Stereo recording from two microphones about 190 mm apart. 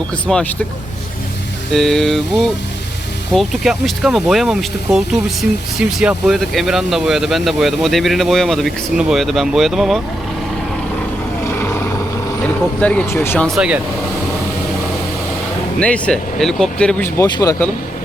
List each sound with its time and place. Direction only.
0.3 s speech: centre (ahead or behind)
1.7 s speech: centre (ahead or behind)
11.6 s vehicle: 15° left (ahead or behind)
12.8 s speech: 5° left (ahead or behind)
13.6 s speech: 5° right (ahead or behind)
15.8 s speech: 5° left (ahead or behind)
17.2 s speech: 20° left (ahead or behind)